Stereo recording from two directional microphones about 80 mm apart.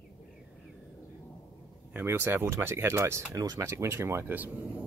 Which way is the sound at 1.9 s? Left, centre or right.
Right.